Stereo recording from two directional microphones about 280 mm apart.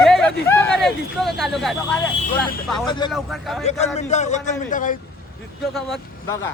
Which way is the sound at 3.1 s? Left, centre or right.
Centre.